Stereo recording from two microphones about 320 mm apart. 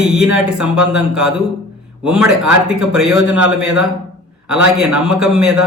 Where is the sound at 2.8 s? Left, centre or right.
Right.